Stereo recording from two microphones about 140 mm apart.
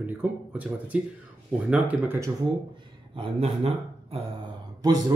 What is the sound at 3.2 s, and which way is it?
Speech, 45° right (ahead or behind).